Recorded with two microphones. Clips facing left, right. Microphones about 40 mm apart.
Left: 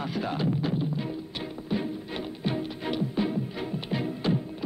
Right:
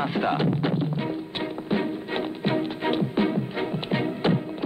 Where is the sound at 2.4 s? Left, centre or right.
Right.